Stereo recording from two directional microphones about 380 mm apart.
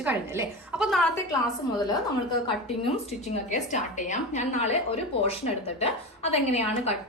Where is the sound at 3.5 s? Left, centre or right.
Centre.